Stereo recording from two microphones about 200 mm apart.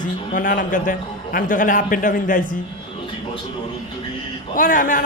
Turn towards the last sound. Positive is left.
turn(degrees=45)  # may be behind; listen again after turning